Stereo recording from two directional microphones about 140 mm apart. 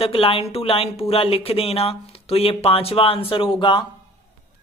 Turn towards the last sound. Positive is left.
turn(degrees=35)  # may be behind; listen again after turning